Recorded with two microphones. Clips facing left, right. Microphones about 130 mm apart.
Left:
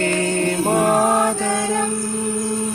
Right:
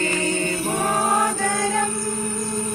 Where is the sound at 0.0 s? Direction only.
55° left (ahead or behind).